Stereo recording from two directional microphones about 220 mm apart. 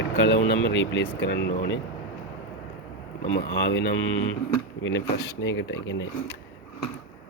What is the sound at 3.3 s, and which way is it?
Speech, 55° left (ahead or behind).